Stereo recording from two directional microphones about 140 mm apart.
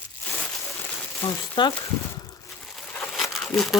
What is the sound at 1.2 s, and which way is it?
Speech, 35° left (ahead or behind).